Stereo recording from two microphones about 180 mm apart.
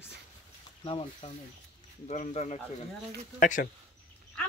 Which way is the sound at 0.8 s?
30° left (ahead or behind).